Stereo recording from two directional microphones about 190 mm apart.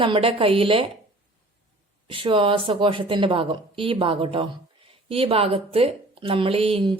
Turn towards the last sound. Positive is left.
turn(degrees=-30)  # may be behind; listen again after turning